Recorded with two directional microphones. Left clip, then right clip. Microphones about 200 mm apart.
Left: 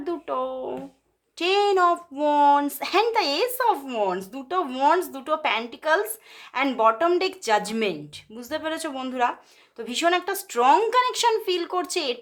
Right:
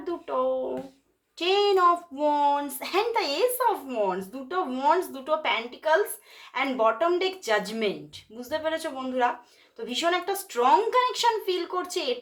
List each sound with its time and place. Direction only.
0.0 s music: 40° left (ahead or behind)
1.4 s a child's voice: 30° left (ahead or behind)